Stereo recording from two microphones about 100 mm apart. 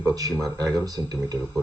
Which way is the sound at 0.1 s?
35° right (ahead or behind).